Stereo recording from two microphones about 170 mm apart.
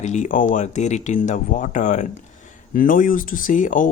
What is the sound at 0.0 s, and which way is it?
Speech, 45° left (ahead or behind).